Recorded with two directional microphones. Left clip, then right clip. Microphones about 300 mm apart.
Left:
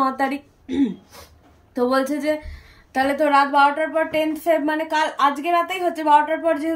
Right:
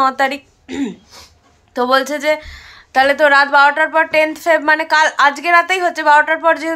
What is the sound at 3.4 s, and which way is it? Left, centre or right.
A woman's voice, right.